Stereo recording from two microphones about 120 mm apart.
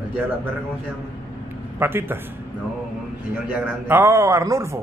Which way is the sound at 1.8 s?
20° right (ahead or behind).